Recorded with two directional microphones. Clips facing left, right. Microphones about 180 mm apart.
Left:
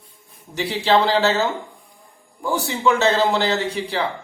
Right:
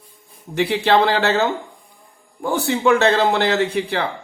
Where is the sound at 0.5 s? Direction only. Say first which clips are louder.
Right 2 dB; 60° right (ahead or behind).